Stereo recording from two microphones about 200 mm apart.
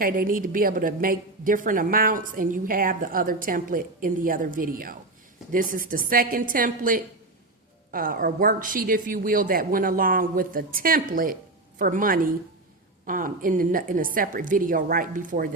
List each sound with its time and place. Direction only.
0.0 s a woman's voice: 45° right (ahead or behind)